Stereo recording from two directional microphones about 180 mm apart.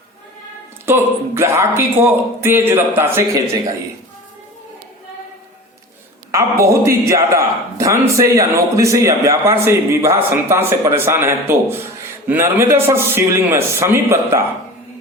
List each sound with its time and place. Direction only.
0.9 s a man's voice: 15° right (ahead or behind)
6.3 s a man's voice: 15° right (ahead or behind)